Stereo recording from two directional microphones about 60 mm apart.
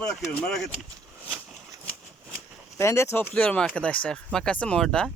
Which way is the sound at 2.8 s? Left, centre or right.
Left.